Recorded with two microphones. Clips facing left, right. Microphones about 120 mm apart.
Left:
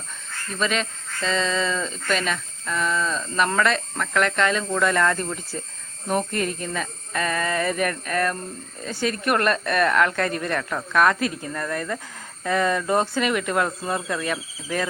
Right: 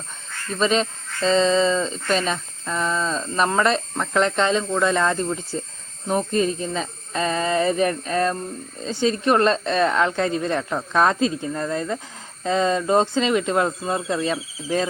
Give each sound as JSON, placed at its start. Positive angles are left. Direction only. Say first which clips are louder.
{"t": 0.6, "sound": "speech", "louder": "right 5 dB", "side_deg": -30}